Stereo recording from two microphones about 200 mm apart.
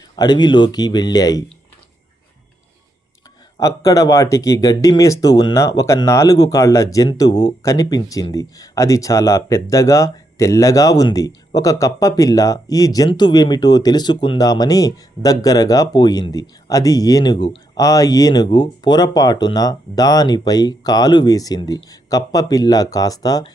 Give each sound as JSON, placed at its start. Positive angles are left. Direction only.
{"t": 0.2, "sound": "a man's voice", "side_deg": 20}
{"t": 3.6, "sound": "speech", "side_deg": 15}